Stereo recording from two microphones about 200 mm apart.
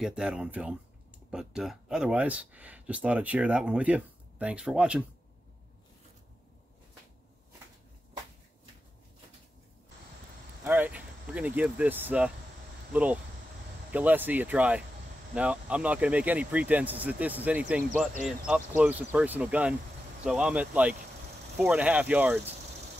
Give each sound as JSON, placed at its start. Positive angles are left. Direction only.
{"t": 0.0, "sound": "speech", "side_deg": -5}
{"t": 10.6, "sound": "speech", "side_deg": -10}